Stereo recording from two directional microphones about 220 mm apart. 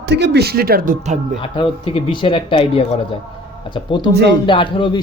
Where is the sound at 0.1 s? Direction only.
50° right (ahead or behind).